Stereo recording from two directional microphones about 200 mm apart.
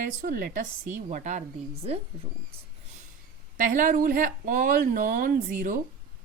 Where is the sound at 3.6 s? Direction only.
40° right (ahead or behind).